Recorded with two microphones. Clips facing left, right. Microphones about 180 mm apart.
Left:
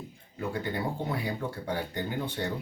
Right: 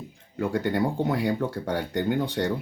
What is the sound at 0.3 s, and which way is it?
Speech, 90° right.